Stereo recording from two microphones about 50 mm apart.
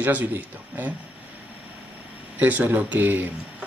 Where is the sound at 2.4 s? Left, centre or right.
Right.